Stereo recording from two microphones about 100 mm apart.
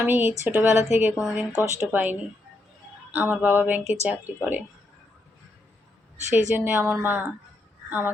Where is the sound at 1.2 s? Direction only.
5° right (ahead or behind).